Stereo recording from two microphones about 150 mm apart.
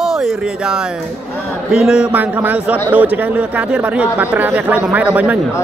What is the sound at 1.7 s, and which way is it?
Speech, 5° right (ahead or behind).